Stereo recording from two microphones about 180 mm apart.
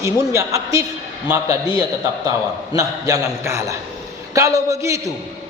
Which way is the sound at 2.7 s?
20° right (ahead or behind).